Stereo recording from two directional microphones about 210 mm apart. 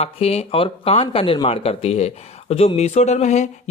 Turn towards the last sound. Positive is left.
turn(degrees=35)  # may be behind; listen again after turning